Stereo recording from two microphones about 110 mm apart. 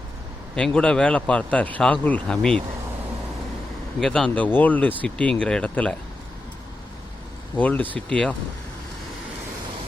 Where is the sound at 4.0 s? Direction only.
5° left (ahead or behind).